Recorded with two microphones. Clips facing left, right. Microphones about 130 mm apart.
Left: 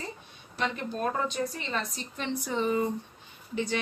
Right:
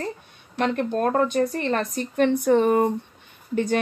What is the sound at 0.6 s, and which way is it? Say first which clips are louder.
A woman's voice: right 8 dB; 55° right (ahead or behind).